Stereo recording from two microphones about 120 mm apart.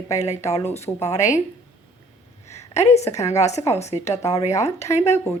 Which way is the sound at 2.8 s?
65° left (ahead or behind).